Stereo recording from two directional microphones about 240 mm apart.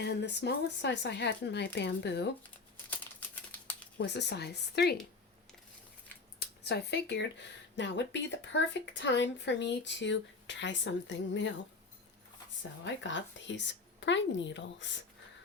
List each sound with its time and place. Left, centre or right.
0.0 s a woman's voice: left
3.9 s a woman's voice: left
6.7 s a woman's voice: left
12.8 s a woman's voice: left